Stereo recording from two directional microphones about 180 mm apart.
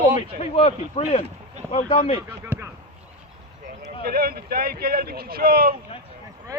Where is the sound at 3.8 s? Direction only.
55° right (ahead or behind).